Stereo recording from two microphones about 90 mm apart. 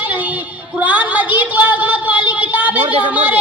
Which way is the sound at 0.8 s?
15° right (ahead or behind).